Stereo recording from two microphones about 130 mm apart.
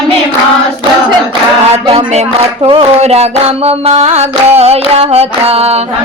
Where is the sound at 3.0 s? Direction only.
55° right (ahead or behind).